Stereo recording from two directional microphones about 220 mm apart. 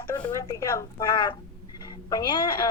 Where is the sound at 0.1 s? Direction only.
15° left (ahead or behind).